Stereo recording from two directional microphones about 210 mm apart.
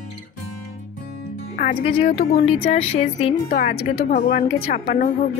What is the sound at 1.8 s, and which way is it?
Speech, 25° left (ahead or behind).